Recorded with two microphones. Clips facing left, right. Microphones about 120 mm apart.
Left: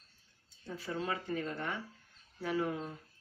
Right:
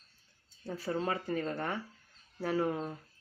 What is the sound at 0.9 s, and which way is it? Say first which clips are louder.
Speech: right 3 dB; 40° right (ahead or behind).